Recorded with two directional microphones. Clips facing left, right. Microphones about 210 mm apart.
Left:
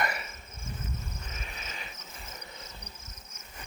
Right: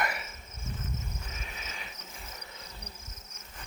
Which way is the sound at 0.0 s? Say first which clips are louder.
Left 1 dB; 5° right (ahead or behind).